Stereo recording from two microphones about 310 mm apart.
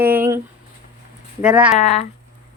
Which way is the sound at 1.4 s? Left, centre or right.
Centre.